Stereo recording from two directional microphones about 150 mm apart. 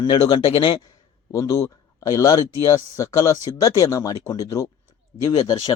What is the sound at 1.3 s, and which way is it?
Speech, 20° left (ahead or behind).